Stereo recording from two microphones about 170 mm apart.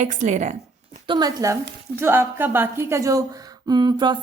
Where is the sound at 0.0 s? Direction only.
45° right (ahead or behind).